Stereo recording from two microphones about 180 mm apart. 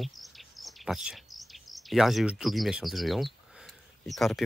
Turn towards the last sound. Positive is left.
turn(degrees=0)  # may be behind; listen again after turning